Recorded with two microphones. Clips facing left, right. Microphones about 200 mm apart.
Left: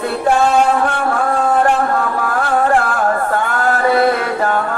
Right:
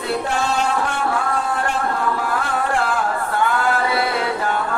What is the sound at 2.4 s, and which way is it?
Music, 50° left (ahead or behind).